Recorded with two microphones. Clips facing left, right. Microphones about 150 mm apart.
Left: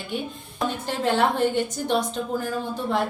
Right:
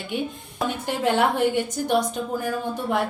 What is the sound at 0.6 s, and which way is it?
A woman's voice, 15° right (ahead or behind).